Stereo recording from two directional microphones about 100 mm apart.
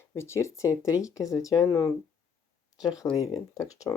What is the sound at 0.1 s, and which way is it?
Speech, 25° left (ahead or behind).